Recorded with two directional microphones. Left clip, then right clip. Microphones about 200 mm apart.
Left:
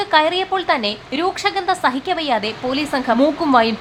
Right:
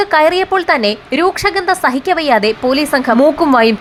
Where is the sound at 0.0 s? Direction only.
25° right (ahead or behind).